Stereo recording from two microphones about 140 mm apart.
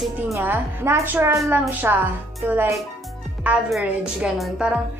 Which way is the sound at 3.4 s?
5° right (ahead or behind).